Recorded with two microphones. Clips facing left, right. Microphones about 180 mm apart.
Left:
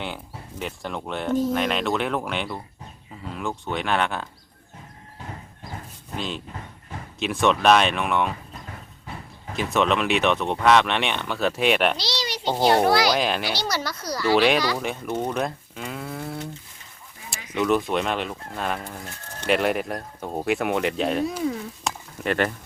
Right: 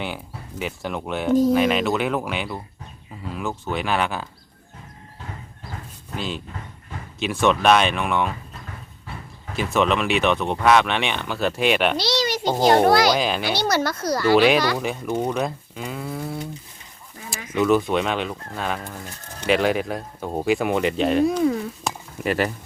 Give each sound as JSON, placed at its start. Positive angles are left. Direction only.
{"t": 0.6, "sound": "speech", "side_deg": -5}
{"t": 6.1, "sound": "speech", "side_deg": 0}
{"t": 9.5, "sound": "speech", "side_deg": 0}
{"t": 11.9, "sound": "speech", "side_deg": -50}
{"t": 13.1, "sound": "speech", "side_deg": 0}
{"t": 13.4, "sound": "speech", "side_deg": -55}
{"t": 14.3, "sound": "speech", "side_deg": 0}
{"t": 17.5, "sound": "speech", "side_deg": 0}
{"t": 21.8, "sound": "insect", "side_deg": -5}